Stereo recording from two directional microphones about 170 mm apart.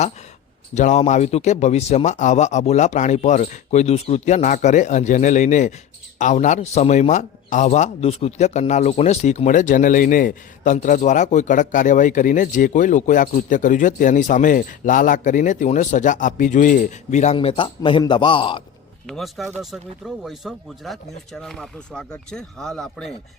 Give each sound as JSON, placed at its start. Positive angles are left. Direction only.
{"t": 0.7, "sound": "a man's voice", "side_deg": 45}
{"t": 17.3, "sound": "a man's voice", "side_deg": 30}
{"t": 19.0, "sound": "speech", "side_deg": 0}